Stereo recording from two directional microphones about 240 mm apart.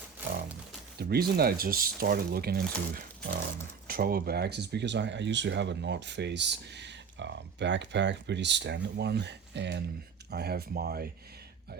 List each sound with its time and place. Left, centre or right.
0.9 s speech: right